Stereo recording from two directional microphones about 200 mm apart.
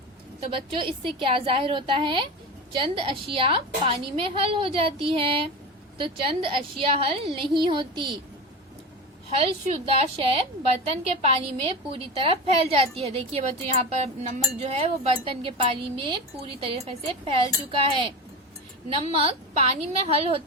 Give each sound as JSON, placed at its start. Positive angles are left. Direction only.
{"t": 0.4, "sound": "speech", "side_deg": -25}
{"t": 9.4, "sound": "speech", "side_deg": -30}
{"t": 19.1, "sound": "speech", "side_deg": -30}